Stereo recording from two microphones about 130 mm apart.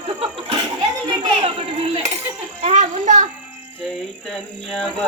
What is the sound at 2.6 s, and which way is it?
Music, 70° right (ahead or behind).